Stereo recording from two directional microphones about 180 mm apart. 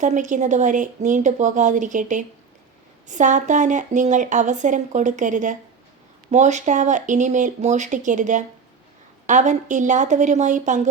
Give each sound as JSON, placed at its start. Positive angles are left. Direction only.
{"t": 0.0, "sound": "speech", "side_deg": -45}